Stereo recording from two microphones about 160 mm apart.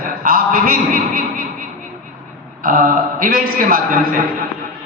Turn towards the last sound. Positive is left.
turn(degrees=-60)  # may be behind; listen again after turning